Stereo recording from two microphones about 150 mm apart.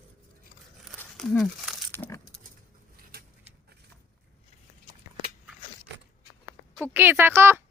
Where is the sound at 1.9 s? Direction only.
15° left (ahead or behind).